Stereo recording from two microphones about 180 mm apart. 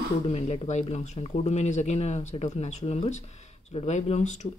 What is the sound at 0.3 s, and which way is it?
Speech, 35° left (ahead or behind).